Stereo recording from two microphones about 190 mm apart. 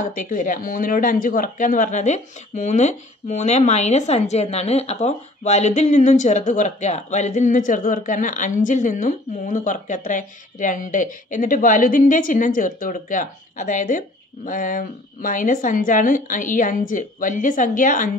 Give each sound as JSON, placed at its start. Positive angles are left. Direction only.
{"t": 0.0, "sound": "speech", "side_deg": 40}